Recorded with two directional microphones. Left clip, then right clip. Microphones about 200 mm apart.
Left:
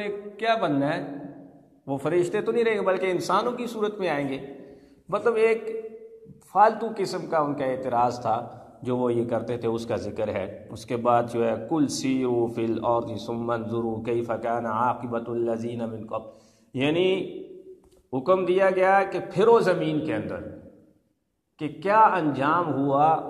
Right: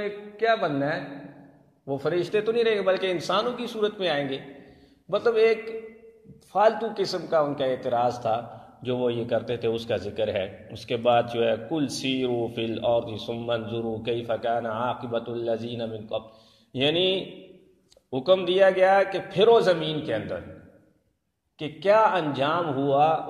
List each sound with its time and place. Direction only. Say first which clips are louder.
0.0 s a man's voice: right 1 dB; 25° right (ahead or behind)
18.1 s a man's voice: even; 30° right (ahead or behind)
21.5 s a man's voice: left 1 dB; 30° right (ahead or behind)